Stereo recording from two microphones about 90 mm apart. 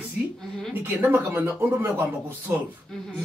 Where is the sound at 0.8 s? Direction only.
20° right (ahead or behind).